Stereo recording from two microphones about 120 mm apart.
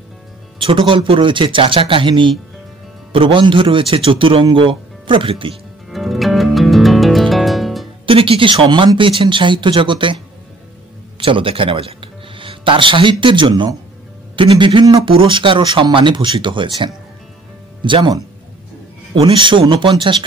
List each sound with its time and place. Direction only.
0.6 s speech: 45° right (ahead or behind)
5.9 s music: centre (ahead or behind)
8.1 s speech: 50° right (ahead or behind)
11.1 s a man's voice: 50° right (ahead or behind)
19.1 s speech: 50° right (ahead or behind)